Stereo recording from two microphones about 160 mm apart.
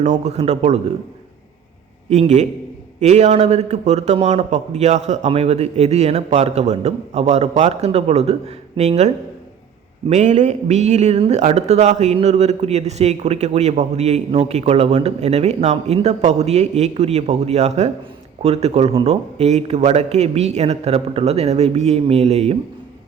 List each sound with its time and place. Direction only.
0.0 s speech: 45° right (ahead or behind)
2.0 s speech: 45° right (ahead or behind)